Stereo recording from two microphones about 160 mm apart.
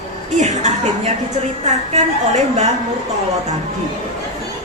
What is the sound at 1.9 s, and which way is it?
Speech, 45° right (ahead or behind).